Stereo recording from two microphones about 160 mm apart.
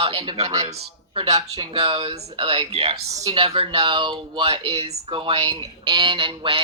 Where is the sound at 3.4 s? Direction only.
35° right (ahead or behind).